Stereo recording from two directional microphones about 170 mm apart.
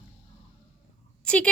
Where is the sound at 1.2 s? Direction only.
5° left (ahead or behind).